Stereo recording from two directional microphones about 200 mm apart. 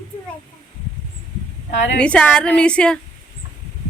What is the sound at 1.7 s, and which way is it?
Speech, 60° left (ahead or behind).